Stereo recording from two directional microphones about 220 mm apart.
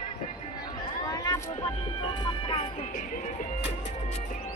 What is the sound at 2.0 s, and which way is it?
Music, 20° left (ahead or behind).